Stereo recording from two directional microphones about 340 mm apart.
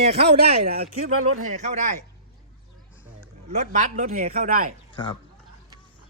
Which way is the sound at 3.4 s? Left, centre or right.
Right.